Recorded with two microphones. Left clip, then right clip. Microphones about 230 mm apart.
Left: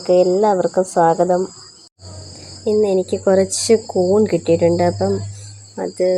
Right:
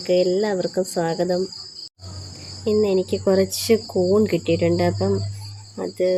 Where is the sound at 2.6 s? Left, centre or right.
Centre.